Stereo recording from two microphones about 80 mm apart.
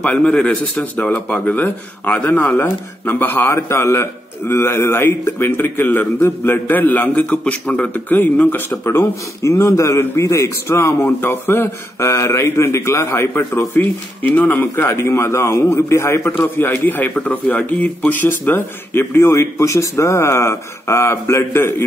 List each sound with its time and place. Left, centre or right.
0.0 s speech: centre; by 21.8 s left